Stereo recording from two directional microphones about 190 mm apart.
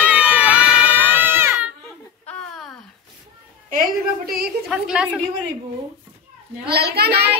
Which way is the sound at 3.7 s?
50° right (ahead or behind).